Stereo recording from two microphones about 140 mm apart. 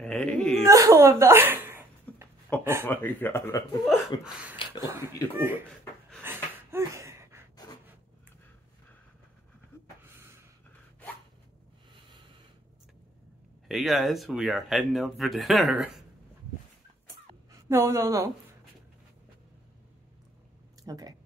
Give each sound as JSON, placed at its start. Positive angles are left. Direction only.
{"t": 0.0, "sound": "speech", "side_deg": 5}
{"t": 0.7, "sound": "a sound", "side_deg": -20}
{"t": 2.6, "sound": "speech", "side_deg": -15}
{"t": 2.9, "sound": "speech", "side_deg": 15}
{"t": 3.8, "sound": "speech", "side_deg": 0}
{"t": 6.2, "sound": "a sound", "side_deg": -20}
{"t": 13.7, "sound": "speech", "side_deg": 0}
{"t": 15.7, "sound": "speech", "side_deg": -10}
{"t": 17.5, "sound": "a woman's voice", "side_deg": -20}
{"t": 20.8, "sound": "speech", "side_deg": -25}